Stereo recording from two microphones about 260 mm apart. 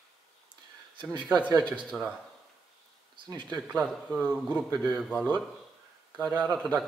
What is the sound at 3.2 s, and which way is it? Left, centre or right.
Speech, centre.